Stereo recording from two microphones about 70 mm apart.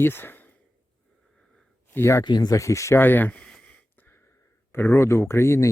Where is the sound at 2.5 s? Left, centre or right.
Left.